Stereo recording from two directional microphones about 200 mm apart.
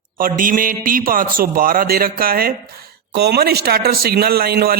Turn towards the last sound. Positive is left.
turn(degrees=-50)  # may be behind; listen again after turning